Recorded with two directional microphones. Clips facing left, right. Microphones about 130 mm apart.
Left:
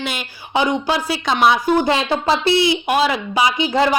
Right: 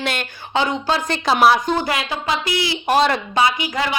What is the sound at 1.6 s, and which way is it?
Speech, 15° left (ahead or behind).